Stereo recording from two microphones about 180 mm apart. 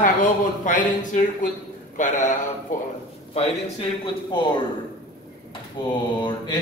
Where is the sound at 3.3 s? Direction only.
30° left (ahead or behind).